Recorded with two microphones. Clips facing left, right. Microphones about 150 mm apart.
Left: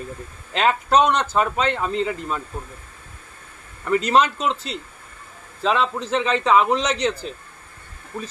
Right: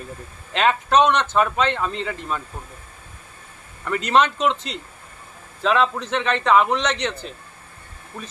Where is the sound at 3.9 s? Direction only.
35° left (ahead or behind).